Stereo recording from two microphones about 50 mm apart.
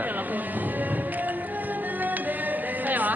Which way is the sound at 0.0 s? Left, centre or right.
Right.